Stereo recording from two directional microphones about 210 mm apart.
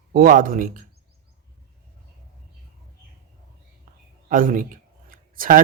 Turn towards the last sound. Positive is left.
turn(degrees=-40)  # may be behind; listen again after turning